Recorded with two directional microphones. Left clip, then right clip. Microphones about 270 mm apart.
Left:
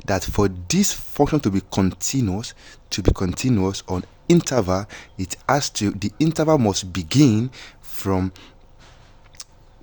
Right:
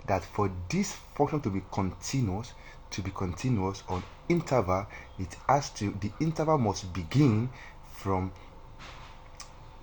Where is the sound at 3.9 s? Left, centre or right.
Left.